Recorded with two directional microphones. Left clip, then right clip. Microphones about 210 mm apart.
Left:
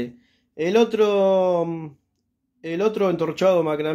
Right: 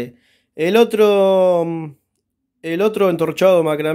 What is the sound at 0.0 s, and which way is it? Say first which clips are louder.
Speech: right 3 dB; 35° right (ahead or behind).